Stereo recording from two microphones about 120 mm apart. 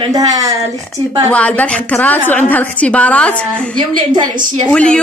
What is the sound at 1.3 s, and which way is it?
A woman's voice, 10° left (ahead or behind).